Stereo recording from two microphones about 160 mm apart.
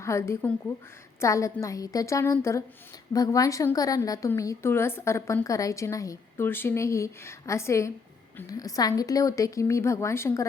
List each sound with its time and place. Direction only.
0.0 s a woman's voice: 15° left (ahead or behind)